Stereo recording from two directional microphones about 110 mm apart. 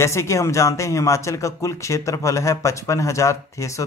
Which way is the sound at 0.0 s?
25° left (ahead or behind).